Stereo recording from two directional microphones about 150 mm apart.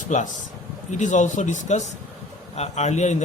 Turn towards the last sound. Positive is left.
turn(degrees=50)  # may be behind; listen again after turning